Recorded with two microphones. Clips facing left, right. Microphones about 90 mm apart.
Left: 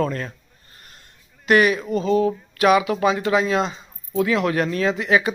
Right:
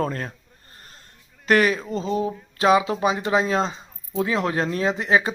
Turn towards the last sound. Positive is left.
turn(degrees=-30)  # may be behind; listen again after turning